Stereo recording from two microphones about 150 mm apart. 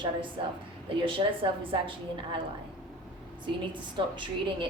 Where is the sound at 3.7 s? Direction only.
35° right (ahead or behind).